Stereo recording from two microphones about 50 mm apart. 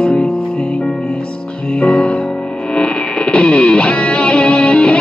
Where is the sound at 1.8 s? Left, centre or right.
Left.